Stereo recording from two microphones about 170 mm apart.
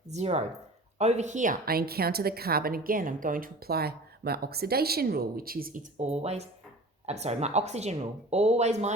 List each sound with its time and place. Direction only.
0.1 s a woman's voice: 40° right (ahead or behind); by 5.8 s 60° right (ahead or behind)
6.0 s speech: 40° right (ahead or behind)